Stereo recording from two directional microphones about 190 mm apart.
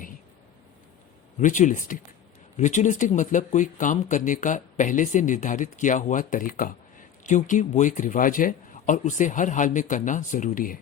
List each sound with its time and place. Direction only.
1.4 s speech: 40° left (ahead or behind)